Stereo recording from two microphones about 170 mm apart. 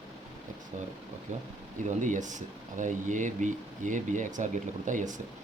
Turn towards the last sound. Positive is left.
turn(degrees=-50)  # may be behind; listen again after turning